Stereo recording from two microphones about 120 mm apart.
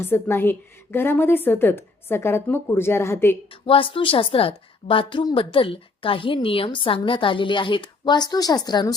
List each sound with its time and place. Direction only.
0.0 s a woman's voice: 20° left (ahead or behind)
3.5 s a woman's voice: 45° left (ahead or behind)